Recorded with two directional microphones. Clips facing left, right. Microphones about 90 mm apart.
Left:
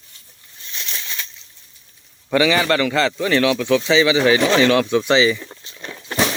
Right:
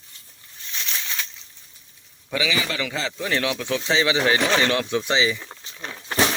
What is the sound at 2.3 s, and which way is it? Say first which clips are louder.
A man's voice: left 9 dB; 55° left (ahead or behind).